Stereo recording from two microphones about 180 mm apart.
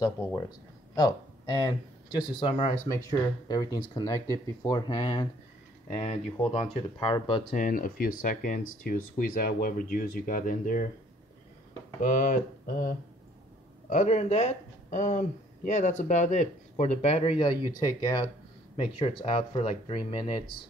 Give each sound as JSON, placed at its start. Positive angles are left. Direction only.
{"t": 0.0, "sound": "speech", "side_deg": 20}
{"t": 2.9, "sound": "speech", "side_deg": 15}
{"t": 6.5, "sound": "speech", "side_deg": 30}
{"t": 7.5, "sound": "speech", "side_deg": 50}
{"t": 12.0, "sound": "speech", "side_deg": 50}